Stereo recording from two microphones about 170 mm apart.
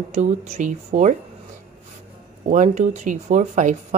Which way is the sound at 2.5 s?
45° right (ahead or behind).